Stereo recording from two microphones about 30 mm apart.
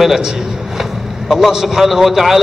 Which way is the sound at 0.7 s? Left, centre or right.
Centre.